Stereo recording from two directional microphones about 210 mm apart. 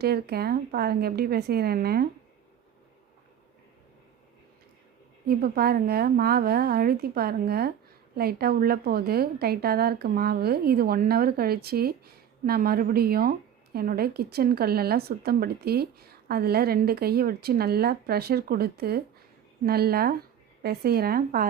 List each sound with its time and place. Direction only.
0.0 s speech: 50° right (ahead or behind)
5.2 s speech: 45° right (ahead or behind)